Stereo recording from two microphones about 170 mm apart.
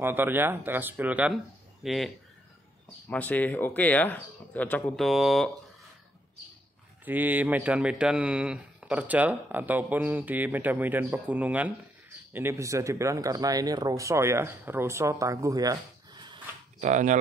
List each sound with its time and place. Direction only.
0.0 s speech: 10° right (ahead or behind)
3.1 s speech: 10° left (ahead or behind)
7.1 s speech: 10° right (ahead or behind)
16.8 s speech: 45° right (ahead or behind)